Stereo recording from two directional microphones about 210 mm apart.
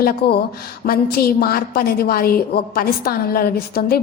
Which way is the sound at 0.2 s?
50° left (ahead or behind).